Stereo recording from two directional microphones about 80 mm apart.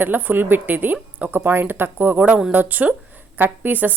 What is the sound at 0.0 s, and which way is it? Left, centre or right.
A woman's voice, right.